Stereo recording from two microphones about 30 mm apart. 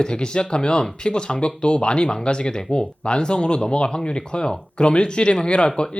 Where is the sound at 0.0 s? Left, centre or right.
Left.